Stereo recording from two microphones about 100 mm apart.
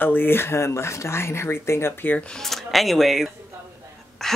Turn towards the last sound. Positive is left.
turn(degrees=5)  # may be behind; listen again after turning